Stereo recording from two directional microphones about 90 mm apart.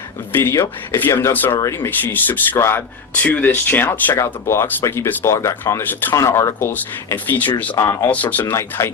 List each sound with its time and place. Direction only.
0.3 s speech: 25° left (ahead or behind)
6.1 s speech: 35° left (ahead or behind)
7.8 s speech: 35° left (ahead or behind)
8.1 s speech: 20° left (ahead or behind)
8.8 s speech: 30° left (ahead or behind)